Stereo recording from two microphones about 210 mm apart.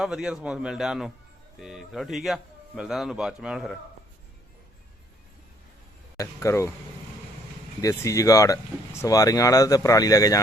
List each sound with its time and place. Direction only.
0.0 s a man's voice: centre (ahead or behind)
6.1 s speech: 15° left (ahead or behind)
7.8 s speech: 15° left (ahead or behind)